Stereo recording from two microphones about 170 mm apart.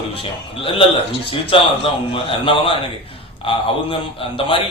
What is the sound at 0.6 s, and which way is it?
A man's voice, 30° left (ahead or behind).